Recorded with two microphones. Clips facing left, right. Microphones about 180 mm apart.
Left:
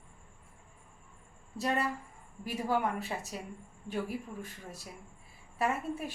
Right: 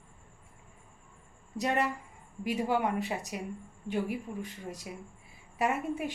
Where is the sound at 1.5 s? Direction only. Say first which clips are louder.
Right 2 dB; 15° right (ahead or behind).